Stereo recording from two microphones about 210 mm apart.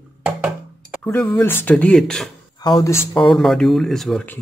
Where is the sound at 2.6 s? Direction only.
15° left (ahead or behind).